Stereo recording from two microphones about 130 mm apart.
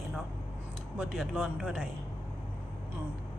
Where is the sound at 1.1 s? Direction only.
Centre (ahead or behind).